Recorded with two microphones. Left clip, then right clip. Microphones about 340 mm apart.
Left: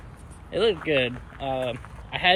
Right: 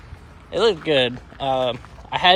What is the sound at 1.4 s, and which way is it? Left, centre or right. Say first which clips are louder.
Speech: right 7 dB; right.